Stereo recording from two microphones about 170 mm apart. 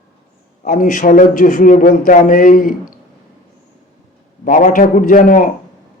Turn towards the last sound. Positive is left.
turn(degrees=50)  # may be behind; listen again after turning